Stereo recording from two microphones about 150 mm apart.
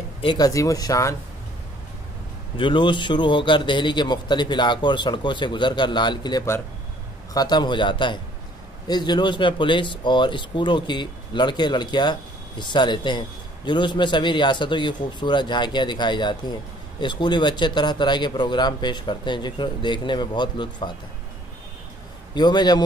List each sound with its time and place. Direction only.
0.2 s speech: 30° left (ahead or behind)
2.5 s speech: 35° left (ahead or behind)
22.3 s speech: 30° left (ahead or behind)